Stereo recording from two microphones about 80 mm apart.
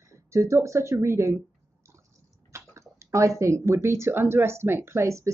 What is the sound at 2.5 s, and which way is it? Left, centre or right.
Speech, right.